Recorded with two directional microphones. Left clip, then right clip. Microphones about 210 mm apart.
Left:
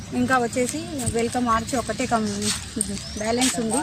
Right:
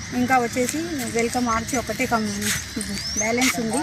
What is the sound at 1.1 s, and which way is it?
Speech, 15° left (ahead or behind).